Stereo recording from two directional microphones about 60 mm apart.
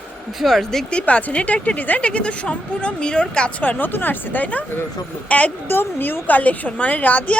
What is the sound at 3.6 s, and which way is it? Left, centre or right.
A woman's voice, left.